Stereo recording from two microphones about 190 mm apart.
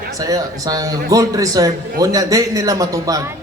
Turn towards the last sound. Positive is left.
turn(degrees=-20)  # may be behind; listen again after turning